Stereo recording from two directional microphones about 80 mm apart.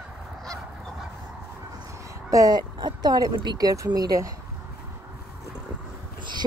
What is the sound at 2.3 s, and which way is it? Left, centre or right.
Speech, right.